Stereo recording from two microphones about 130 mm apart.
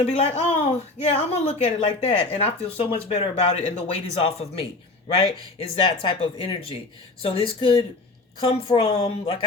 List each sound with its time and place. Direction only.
0.0 s speech: 55° left (ahead or behind)